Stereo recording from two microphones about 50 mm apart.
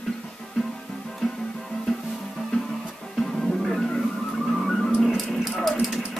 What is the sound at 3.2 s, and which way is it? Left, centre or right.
Music, centre.